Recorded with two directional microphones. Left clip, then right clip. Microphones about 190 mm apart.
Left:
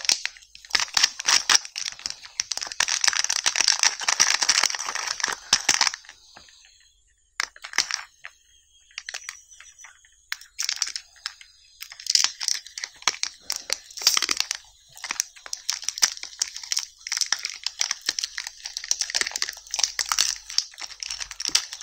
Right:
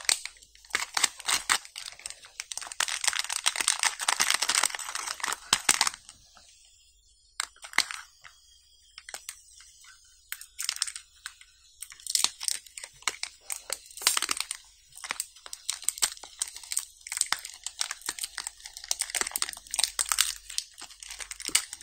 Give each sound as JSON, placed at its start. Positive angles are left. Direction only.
{"t": 0.7, "sound": "camera", "side_deg": 10}
{"t": 2.6, "sound": "a sound", "side_deg": 15}
{"t": 7.3, "sound": "a sound", "side_deg": 20}
{"t": 10.3, "sound": "crunch", "side_deg": 20}
{"t": 13.0, "sound": "crumpling", "side_deg": 25}
{"t": 14.1, "sound": "a sound", "side_deg": 5}
{"t": 15.0, "sound": "crumpling", "side_deg": 15}
{"t": 18.0, "sound": "computer keyboard", "side_deg": 10}
{"t": 19.4, "sound": "crumpling", "side_deg": 5}